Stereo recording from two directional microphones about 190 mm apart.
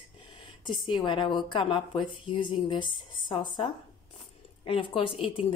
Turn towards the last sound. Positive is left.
turn(degrees=30)  # may be behind; listen again after turning